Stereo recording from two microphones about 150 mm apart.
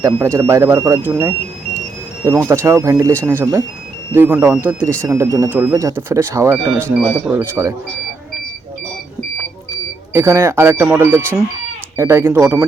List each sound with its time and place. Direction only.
0.3 s speech: 20° right (ahead or behind)
10.1 s speech: 20° right (ahead or behind)